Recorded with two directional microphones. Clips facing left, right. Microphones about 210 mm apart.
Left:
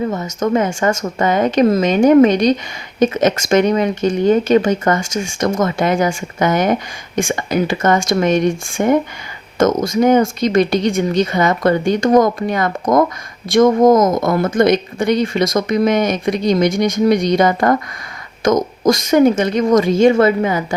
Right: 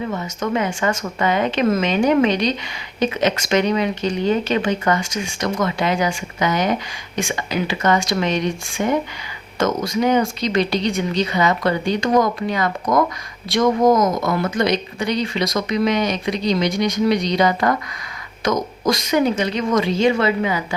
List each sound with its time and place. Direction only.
0.0 s speech: 40° left (ahead or behind)